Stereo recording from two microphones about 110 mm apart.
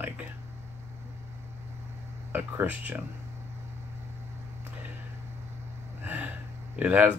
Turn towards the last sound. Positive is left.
turn(degrees=-15)  # may be behind; listen again after turning